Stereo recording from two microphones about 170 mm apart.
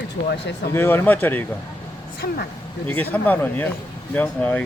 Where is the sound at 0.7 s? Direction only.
15° left (ahead or behind).